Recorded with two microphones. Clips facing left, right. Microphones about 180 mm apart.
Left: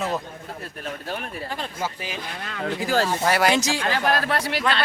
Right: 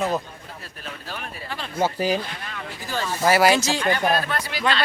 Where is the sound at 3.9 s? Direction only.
90° left; by 4.6 s 70° left (ahead or behind).